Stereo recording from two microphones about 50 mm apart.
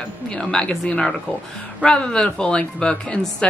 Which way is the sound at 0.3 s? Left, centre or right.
Centre.